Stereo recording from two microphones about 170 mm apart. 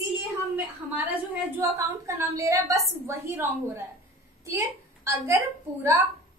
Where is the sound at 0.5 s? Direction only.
10° right (ahead or behind).